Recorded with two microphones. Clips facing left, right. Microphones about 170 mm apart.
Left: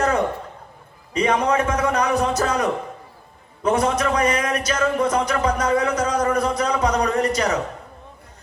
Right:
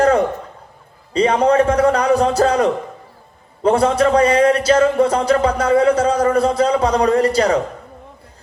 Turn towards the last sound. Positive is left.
turn(degrees=-30)  # may be behind; listen again after turning